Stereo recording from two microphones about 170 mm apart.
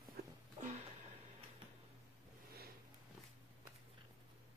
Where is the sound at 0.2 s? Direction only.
70° right (ahead or behind).